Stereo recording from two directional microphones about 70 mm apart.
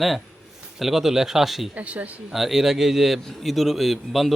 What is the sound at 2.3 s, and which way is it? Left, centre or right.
A man's voice, centre.